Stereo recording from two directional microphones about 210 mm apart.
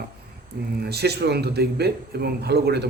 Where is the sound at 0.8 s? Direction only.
50° right (ahead or behind).